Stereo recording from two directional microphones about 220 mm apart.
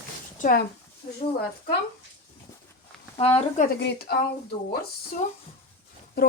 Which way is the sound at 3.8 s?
45° left (ahead or behind).